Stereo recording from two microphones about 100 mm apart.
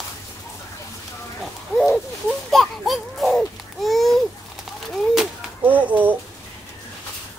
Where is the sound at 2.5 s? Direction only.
Centre (ahead or behind).